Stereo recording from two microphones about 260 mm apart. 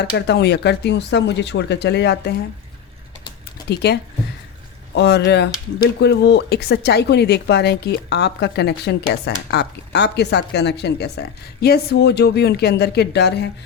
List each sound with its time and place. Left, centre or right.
0.3 s speech: left
3.7 s speech: left